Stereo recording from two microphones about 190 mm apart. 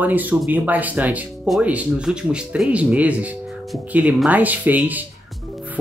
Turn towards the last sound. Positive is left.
turn(degrees=-10)  # may be behind; listen again after turning